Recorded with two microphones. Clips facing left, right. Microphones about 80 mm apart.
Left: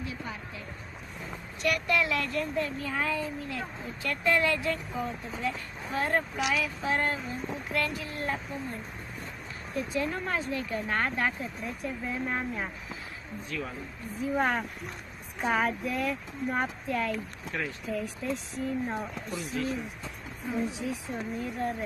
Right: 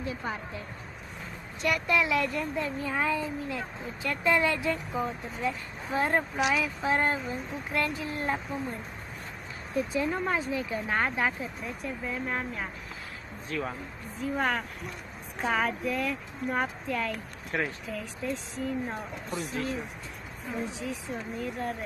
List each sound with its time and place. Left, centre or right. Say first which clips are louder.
0.0 s a sound: right 4 dB; right
1.6 s speech: right 1 dB; right
9.8 s speech: right 3 dB; centre
13.5 s speech: right 4 dB; right
14.3 s speech: left 1 dB; centre
20.5 s speech: left 2 dB; centre